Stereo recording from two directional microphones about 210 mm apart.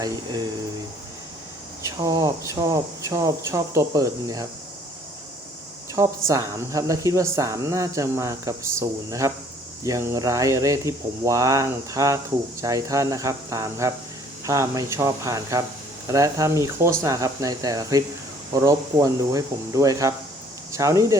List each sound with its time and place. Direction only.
0.0 s speech: 20° right (ahead or behind)
1.8 s speech: 15° right (ahead or behind)
5.9 s speech: 15° right (ahead or behind)